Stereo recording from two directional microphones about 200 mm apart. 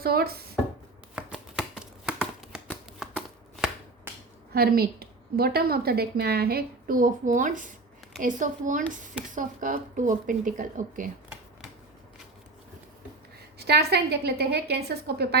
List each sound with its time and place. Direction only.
0.0 s a woman's voice: 50° right (ahead or behind)
1.1 s a sound: centre (ahead or behind)
3.0 s shuffling cards: 5° right (ahead or behind)
4.5 s a woman's voice: 50° right (ahead or behind)
13.6 s a woman's voice: 55° right (ahead or behind)